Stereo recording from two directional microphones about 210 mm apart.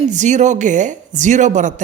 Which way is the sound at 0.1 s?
35° right (ahead or behind).